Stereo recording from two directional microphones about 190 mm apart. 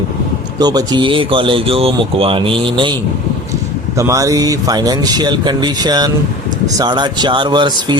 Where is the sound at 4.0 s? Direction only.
15° right (ahead or behind).